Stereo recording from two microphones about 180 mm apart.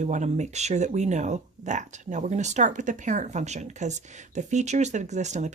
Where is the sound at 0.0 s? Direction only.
40° right (ahead or behind).